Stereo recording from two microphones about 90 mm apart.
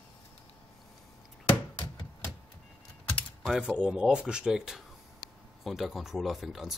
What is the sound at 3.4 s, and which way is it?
Speech, 10° right (ahead or behind).